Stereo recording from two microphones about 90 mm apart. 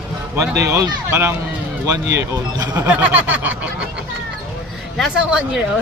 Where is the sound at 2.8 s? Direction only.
20° right (ahead or behind).